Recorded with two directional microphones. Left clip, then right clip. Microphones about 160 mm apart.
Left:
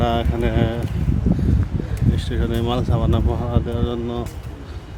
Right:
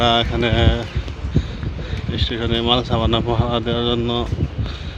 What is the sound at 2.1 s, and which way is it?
Speech, 10° left (ahead or behind).